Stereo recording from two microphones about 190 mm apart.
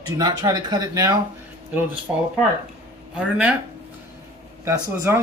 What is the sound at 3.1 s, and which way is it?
Speech, 5° right (ahead or behind).